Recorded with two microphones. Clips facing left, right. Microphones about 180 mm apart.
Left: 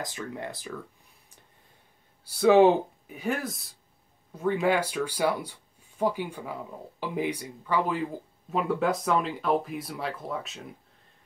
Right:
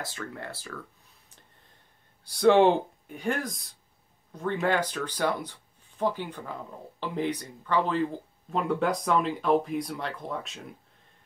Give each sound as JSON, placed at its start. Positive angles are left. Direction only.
{"t": 0.0, "sound": "speech", "side_deg": 15}
{"t": 2.2, "sound": "speech", "side_deg": 5}